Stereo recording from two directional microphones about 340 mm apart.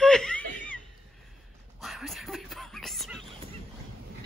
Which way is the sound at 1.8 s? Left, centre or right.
Centre.